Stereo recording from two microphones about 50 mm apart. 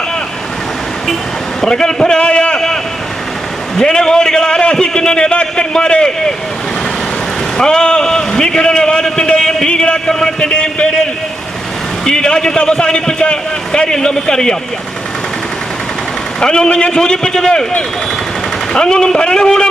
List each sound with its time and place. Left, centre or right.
1.6 s a man's voice: centre
3.8 s a man's voice: centre
7.6 s a man's voice: centre
16.4 s a man's voice: centre
18.7 s a man's voice: centre